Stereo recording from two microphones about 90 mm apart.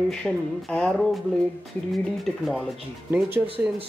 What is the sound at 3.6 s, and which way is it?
Speech, 25° right (ahead or behind).